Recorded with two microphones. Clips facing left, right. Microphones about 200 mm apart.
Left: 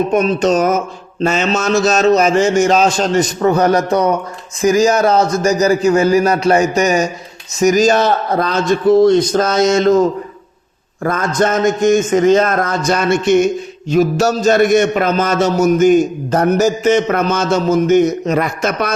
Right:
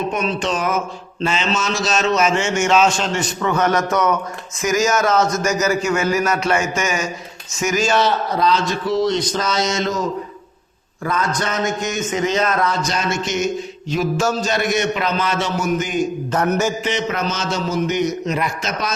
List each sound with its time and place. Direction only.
0.1 s a man's voice: 45° left (ahead or behind)